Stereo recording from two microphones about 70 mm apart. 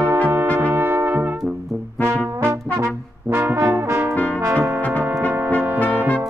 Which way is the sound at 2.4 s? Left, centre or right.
Right.